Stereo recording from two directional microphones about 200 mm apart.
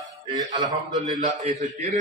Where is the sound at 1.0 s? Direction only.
30° right (ahead or behind).